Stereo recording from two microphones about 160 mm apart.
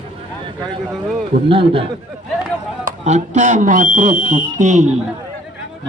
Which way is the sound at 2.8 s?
50° right (ahead or behind).